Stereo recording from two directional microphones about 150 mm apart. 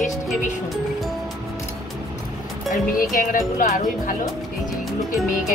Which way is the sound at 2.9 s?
65° left (ahead or behind).